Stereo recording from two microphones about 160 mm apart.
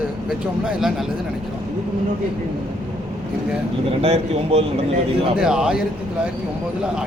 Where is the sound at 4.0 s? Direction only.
40° right (ahead or behind).